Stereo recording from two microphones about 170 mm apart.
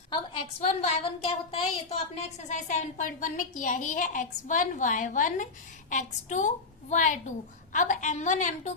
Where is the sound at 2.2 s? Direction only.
45° left (ahead or behind).